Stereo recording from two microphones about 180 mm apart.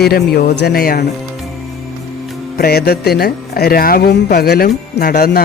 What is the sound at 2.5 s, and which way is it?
Speech, 60° left (ahead or behind).